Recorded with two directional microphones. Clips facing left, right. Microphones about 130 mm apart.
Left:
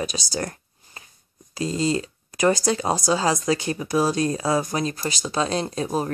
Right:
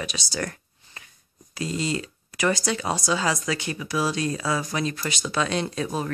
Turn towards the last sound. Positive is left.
turn(degrees=35)  # may be behind; listen again after turning